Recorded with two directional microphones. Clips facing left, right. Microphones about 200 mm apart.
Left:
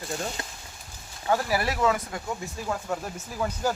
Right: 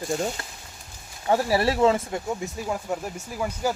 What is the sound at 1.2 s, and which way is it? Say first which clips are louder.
Speech: right 4 dB; 30° right (ahead or behind).